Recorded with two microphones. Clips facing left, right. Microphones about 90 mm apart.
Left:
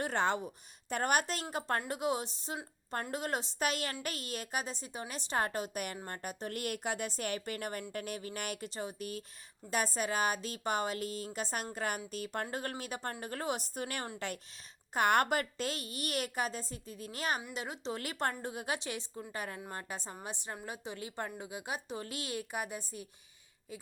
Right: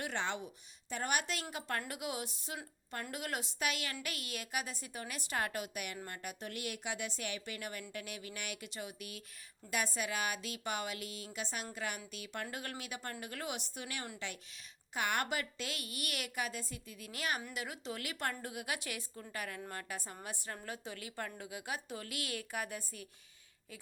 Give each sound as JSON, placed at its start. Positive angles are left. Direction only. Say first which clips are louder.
{"t": 0.0, "sound": "a woman's voice", "louder": "left 6 dB", "side_deg": 45}